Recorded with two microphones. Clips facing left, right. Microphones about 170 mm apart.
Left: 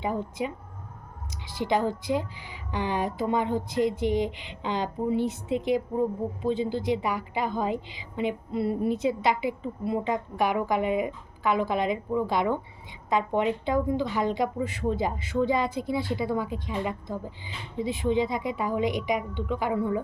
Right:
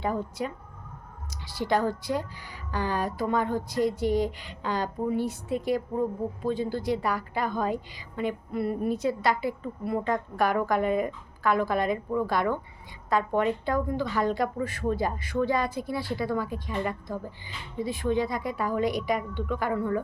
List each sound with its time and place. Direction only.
1.5 s a woman's voice: 15° left (ahead or behind)